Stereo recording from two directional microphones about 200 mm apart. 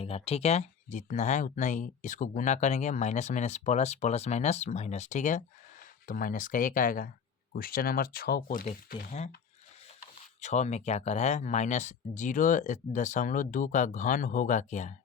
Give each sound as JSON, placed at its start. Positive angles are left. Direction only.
{"t": 0.0, "sound": "speech", "side_deg": 30}
{"t": 10.4, "sound": "speech", "side_deg": 35}